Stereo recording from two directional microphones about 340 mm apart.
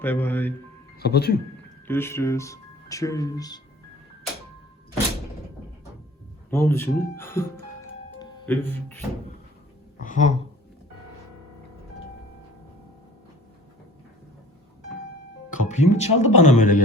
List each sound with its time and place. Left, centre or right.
0.0 s speech: centre
0.9 s speech: left
1.9 s speech: centre
6.5 s speech: centre
10.0 s speech: left
15.5 s speech: centre